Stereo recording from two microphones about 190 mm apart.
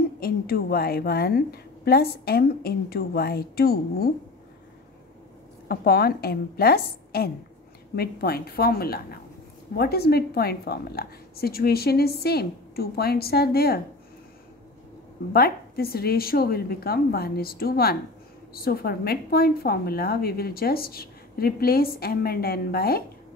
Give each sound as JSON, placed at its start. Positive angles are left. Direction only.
{"t": 0.2, "sound": "a woman's voice", "side_deg": 55}
{"t": 5.7, "sound": "a woman's voice", "side_deg": 55}
{"t": 15.3, "sound": "a woman's voice", "side_deg": 55}